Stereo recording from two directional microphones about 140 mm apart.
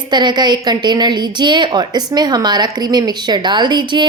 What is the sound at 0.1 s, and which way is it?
A woman's voice, 30° right (ahead or behind).